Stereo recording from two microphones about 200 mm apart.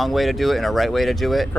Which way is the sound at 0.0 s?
Centre (ahead or behind).